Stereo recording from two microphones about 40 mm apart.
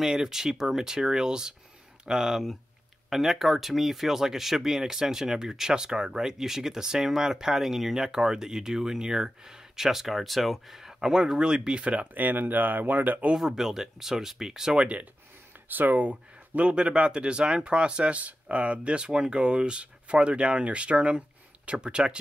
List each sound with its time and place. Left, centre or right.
0.0 s speech: centre; by 12.1 s right
12.1 s speech: right
13.6 s speech: centre
14.7 s speech: right
15.7 s speech: right
16.7 s speech: right